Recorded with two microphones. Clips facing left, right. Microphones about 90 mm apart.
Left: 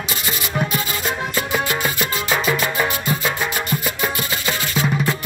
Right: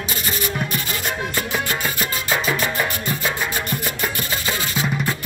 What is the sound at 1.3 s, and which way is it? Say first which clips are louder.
Music: left 2 dB; 15° left (ahead or behind).